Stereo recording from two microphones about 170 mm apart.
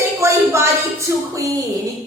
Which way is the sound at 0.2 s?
15° right (ahead or behind).